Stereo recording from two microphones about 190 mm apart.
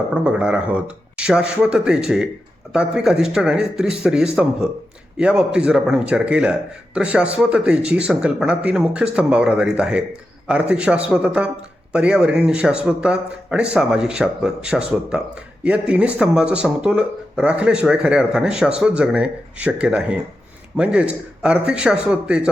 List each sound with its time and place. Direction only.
0.1 s a man's voice: 5° right (ahead or behind)